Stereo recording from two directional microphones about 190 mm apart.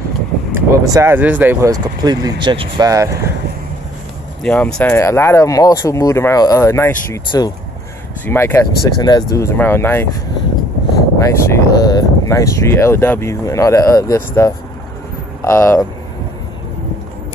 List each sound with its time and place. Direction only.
0.5 s speech: 15° right (ahead or behind)
4.4 s speech: 5° left (ahead or behind)
11.1 s speech: 15° left (ahead or behind)